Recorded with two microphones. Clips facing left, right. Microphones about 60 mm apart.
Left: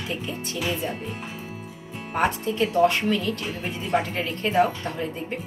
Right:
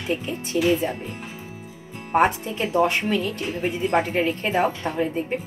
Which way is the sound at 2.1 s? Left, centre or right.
Right.